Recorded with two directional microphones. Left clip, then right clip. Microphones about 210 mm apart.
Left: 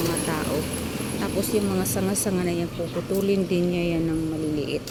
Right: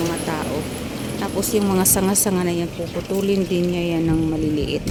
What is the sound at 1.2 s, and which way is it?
Speech, 15° right (ahead or behind).